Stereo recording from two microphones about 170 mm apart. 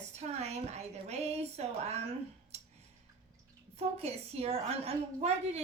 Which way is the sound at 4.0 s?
35° right (ahead or behind).